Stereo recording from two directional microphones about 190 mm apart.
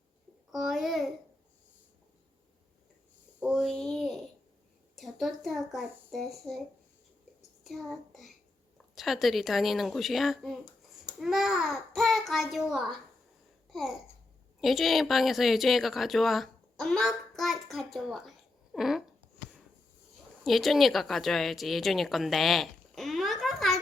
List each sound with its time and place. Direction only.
0.5 s speech: centre (ahead or behind)
3.4 s a sound: centre (ahead or behind)
4.9 s a child's voice: centre (ahead or behind)
7.6 s a child's voice: centre (ahead or behind)
20.4 s speech: centre (ahead or behind)